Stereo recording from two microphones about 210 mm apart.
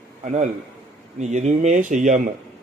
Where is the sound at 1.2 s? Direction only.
35° right (ahead or behind).